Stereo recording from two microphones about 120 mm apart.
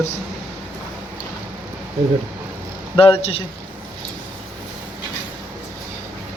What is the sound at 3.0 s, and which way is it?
Speech, 50° left (ahead or behind).